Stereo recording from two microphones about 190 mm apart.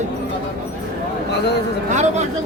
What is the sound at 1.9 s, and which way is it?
Speech, 40° right (ahead or behind).